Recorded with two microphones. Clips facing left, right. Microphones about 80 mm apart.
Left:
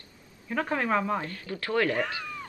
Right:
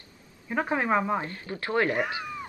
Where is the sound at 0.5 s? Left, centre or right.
Right.